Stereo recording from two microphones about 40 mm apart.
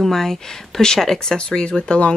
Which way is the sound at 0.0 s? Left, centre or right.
Centre.